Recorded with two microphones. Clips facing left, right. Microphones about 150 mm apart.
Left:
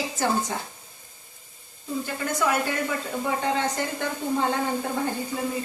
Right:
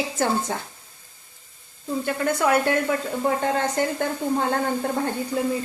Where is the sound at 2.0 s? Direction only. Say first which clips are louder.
Right 4 dB; 60° right (ahead or behind).